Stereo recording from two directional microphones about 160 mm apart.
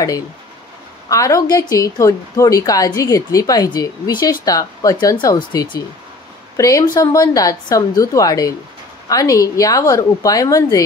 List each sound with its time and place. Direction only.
1.0 s speech: 20° left (ahead or behind)